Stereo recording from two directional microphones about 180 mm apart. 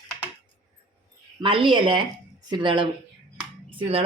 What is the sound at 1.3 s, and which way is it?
Speech, 30° right (ahead or behind).